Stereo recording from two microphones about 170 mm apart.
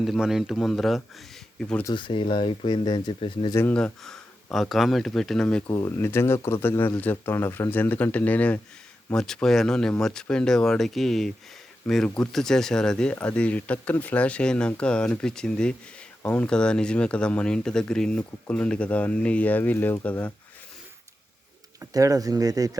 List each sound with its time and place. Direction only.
0.0 s speech: centre (ahead or behind)
1.8 s speech: 25° left (ahead or behind)
3.5 s speech: 10° left (ahead or behind)
5.7 s speech: 15° left (ahead or behind)
21.8 s speech: 20° right (ahead or behind)